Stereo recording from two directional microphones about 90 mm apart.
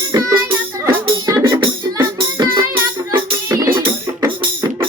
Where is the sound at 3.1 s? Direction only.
35° right (ahead or behind).